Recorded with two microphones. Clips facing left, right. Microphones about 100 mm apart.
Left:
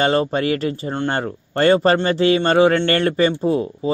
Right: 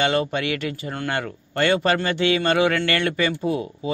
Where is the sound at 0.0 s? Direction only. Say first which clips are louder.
Left 4 dB; 35° left (ahead or behind).